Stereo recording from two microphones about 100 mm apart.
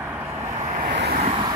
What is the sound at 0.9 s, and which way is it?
Vehicle, 90° right.